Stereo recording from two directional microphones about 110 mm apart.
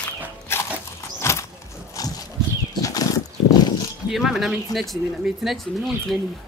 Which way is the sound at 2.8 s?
30° left (ahead or behind).